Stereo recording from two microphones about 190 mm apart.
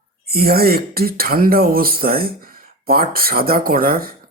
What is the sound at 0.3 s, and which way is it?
Speech, 55° right (ahead or behind).